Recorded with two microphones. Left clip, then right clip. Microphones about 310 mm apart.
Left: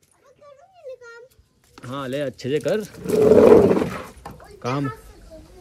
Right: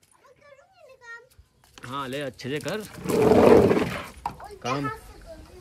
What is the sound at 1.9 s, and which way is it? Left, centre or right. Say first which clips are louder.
Speech: left 4 dB; centre.